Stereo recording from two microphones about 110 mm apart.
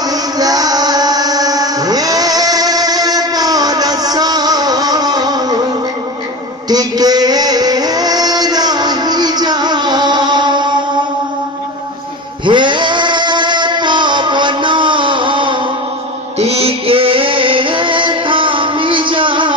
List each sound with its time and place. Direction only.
0.1 s music: 35° right (ahead or behind)
6.7 s music: 35° right (ahead or behind)
12.4 s music: 45° right (ahead or behind)
16.3 s music: 70° right (ahead or behind); by 19.5 s 50° right (ahead or behind)